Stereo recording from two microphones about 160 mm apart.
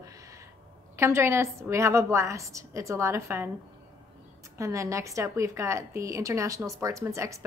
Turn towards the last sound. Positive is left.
turn(degrees=-20)  # may be behind; listen again after turning